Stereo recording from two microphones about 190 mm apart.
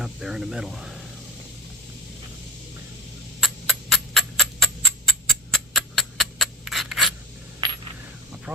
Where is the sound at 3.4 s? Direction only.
Centre (ahead or behind).